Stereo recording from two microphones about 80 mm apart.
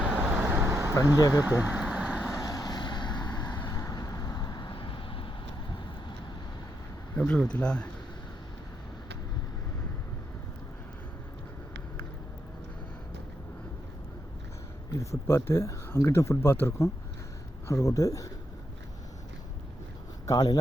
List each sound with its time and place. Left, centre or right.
0.0 s vehicle: centre
0.4 s vehicle: right
1.5 s speech: right
1.8 s vehicle: centre
2.3 s vehicle: left
3.8 s vehicle: left
7.2 s speech: centre
14.9 s speech: left
17.7 s speech: left
20.2 s speech: left